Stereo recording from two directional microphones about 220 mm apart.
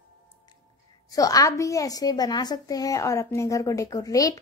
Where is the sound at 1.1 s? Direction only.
15° left (ahead or behind).